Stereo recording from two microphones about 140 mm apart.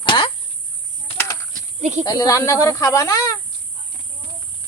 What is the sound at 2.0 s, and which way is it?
Speech, 25° left (ahead or behind).